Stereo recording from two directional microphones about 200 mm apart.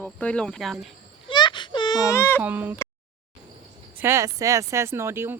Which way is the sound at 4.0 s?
15° right (ahead or behind).